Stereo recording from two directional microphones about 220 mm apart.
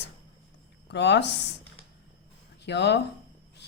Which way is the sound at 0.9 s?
50° left (ahead or behind).